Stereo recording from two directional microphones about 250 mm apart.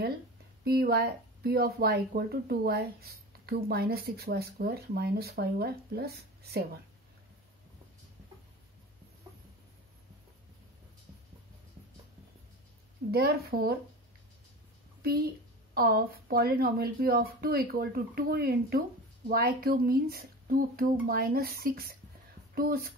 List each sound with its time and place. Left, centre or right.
0.7 s speech: right
13.1 s speech: right
15.0 s a child's voice: right